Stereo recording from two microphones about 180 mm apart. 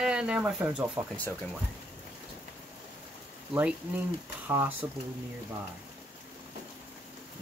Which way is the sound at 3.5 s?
10° right (ahead or behind).